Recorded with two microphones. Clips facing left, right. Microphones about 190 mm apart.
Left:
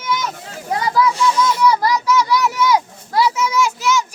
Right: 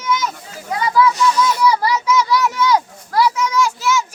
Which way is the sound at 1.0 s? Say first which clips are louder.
Right 1 dB; 25° left (ahead or behind).